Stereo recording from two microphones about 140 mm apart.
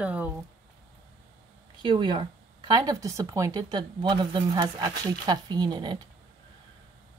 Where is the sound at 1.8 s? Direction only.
35° right (ahead or behind).